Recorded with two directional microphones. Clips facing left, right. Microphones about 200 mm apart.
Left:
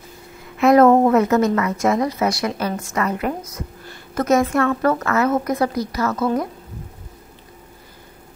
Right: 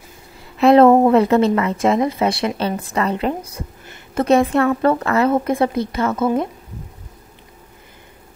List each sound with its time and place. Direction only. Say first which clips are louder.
0.6 s a woman's voice: right 2 dB; 30° right (ahead or behind)